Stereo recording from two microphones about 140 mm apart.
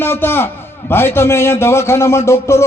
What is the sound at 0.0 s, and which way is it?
A man's voice, 15° left (ahead or behind).